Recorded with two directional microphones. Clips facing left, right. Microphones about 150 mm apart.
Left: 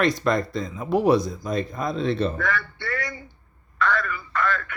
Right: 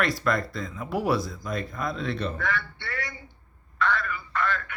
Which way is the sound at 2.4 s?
80° left.